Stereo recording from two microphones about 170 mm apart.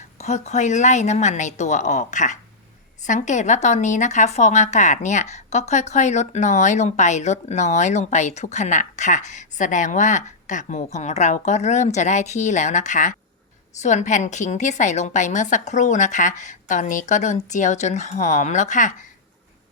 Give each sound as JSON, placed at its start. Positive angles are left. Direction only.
{"t": 0.2, "sound": "speech", "side_deg": 40}